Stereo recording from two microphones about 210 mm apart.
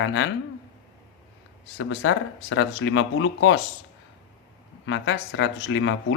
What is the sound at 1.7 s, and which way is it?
Speech, 80° left.